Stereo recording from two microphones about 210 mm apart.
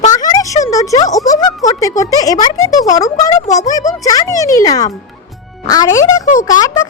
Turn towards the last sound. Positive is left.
turn(degrees=15)  # may be behind; listen again after turning